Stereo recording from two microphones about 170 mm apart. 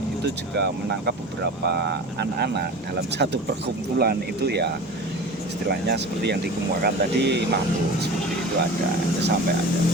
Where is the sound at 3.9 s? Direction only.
70° right (ahead or behind).